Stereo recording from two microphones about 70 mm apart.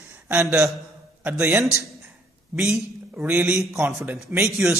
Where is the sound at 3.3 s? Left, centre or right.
Right.